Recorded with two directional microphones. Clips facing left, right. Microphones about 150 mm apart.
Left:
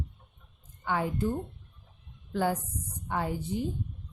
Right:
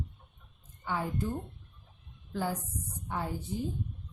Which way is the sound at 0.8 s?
65° left (ahead or behind).